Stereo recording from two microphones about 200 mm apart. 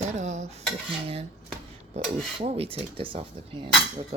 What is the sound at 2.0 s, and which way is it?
Speech, 30° right (ahead or behind).